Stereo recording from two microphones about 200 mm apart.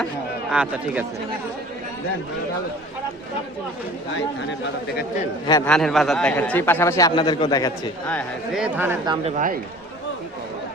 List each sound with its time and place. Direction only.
0.5 s speech: 5° right (ahead or behind)
5.6 s a man's voice: 5° left (ahead or behind); by 7.7 s 20° left (ahead or behind)
8.0 s a man's voice: 5° left (ahead or behind)
8.6 s speech: 10° right (ahead or behind)
9.0 s speech: 35° right (ahead or behind)